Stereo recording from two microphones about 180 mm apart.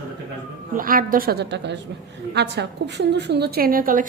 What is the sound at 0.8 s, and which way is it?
A woman's voice, 50° right (ahead or behind).